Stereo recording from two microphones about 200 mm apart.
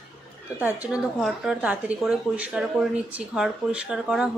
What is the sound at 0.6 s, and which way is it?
Speech, 5° right (ahead or behind).